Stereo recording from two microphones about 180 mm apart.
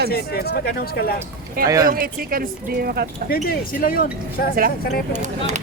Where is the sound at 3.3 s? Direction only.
55° left (ahead or behind).